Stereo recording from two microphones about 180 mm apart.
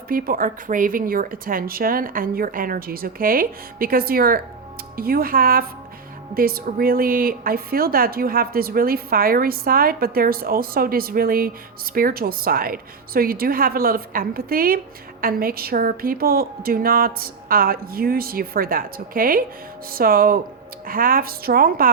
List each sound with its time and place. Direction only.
0.1 s speech: 50° right (ahead or behind)